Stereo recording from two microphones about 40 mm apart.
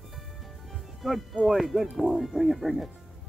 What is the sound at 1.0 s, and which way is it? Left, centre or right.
Speech, centre.